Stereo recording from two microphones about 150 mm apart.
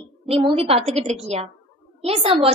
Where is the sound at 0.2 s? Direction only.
40° right (ahead or behind).